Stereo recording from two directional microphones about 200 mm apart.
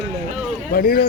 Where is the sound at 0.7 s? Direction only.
45° left (ahead or behind).